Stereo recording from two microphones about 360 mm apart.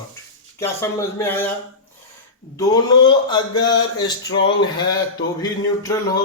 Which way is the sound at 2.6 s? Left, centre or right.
Centre.